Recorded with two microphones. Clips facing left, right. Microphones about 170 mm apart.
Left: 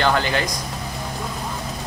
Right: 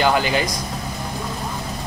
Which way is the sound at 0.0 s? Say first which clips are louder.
Right 2 dB; 10° right (ahead or behind).